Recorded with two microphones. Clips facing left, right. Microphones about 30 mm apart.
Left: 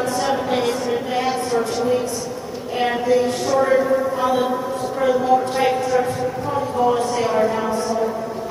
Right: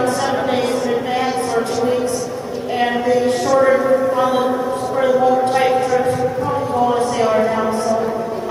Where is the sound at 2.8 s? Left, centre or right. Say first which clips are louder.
Right 2 dB; centre.